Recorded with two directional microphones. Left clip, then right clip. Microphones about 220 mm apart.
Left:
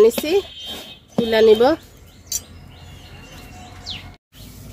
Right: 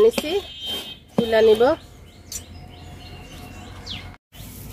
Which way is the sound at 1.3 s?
50° left (ahead or behind).